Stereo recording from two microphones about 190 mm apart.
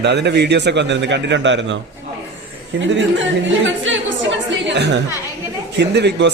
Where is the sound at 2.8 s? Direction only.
75° right (ahead or behind).